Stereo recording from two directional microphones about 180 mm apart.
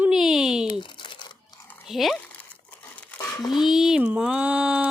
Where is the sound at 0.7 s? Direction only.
25° left (ahead or behind).